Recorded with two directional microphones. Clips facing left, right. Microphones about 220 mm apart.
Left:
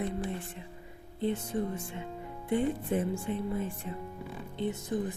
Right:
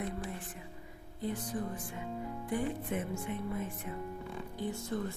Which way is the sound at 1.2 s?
25° left (ahead or behind).